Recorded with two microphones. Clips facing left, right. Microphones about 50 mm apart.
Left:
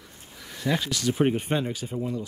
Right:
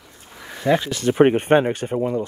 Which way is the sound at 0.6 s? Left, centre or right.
Right.